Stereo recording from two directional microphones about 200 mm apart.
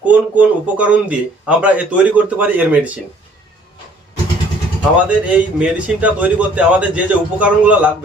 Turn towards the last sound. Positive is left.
turn(degrees=-5)  # may be behind; listen again after turning